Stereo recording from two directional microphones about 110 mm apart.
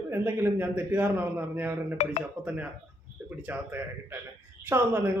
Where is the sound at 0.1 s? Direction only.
20° right (ahead or behind).